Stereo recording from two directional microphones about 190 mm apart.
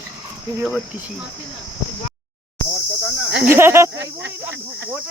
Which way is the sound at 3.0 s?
Centre (ahead or behind).